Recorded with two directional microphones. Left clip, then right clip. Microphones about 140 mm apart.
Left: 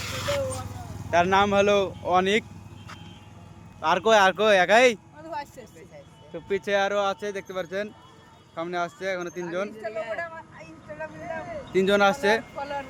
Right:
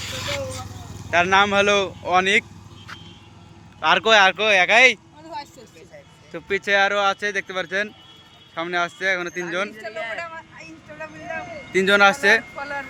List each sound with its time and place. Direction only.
0.0 s vehicle: centre (ahead or behind)
1.1 s speech: 20° left (ahead or behind)
3.8 s speech: 5° left (ahead or behind)
4.4 s speech: 50° left (ahead or behind)
6.5 s speech: 10° left (ahead or behind)
10.2 s a sound: 20° left (ahead or behind)
12.5 s speech: 25° left (ahead or behind)